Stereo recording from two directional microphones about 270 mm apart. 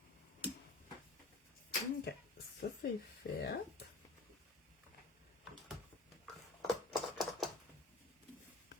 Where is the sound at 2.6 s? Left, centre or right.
Left.